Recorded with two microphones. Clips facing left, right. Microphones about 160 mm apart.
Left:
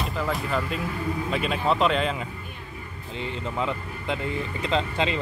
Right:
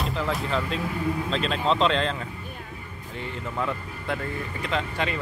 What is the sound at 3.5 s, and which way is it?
Speech, 20° left (ahead or behind).